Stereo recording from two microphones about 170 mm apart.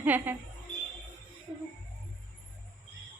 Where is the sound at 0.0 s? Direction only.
10° right (ahead or behind).